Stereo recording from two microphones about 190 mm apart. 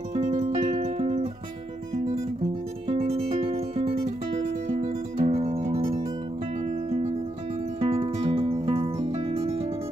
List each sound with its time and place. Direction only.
0.1 s music: 35° right (ahead or behind)
2.9 s music: 30° right (ahead or behind)
7.8 s music: 35° right (ahead or behind)